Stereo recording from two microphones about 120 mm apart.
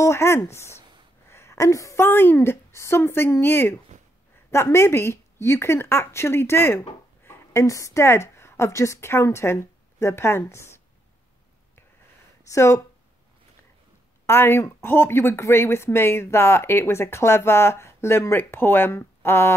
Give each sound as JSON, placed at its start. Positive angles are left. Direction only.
{"t": 0.0, "sound": "a woman's voice", "side_deg": 20}
{"t": 12.4, "sound": "speech", "side_deg": 25}
{"t": 14.2, "sound": "speech", "side_deg": 20}